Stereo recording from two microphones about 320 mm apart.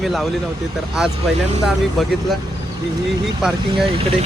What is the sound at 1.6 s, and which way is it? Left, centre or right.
Speech, centre.